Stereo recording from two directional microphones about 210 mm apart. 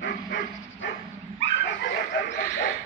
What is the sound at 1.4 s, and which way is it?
Dog, 60° left (ahead or behind).